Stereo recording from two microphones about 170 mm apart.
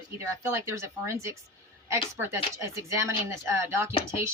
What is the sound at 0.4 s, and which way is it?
Speech, 15° right (ahead or behind).